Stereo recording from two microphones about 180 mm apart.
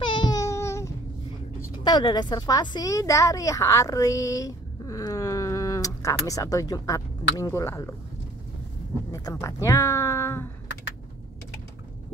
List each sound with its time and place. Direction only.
0.0 s a sound: 25° left (ahead or behind)
1.9 s a woman's voice: 25° left (ahead or behind)
9.1 s a woman's voice: 15° left (ahead or behind)